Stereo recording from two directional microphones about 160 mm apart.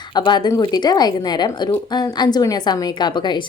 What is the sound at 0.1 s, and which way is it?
A woman's voice, 30° left (ahead or behind).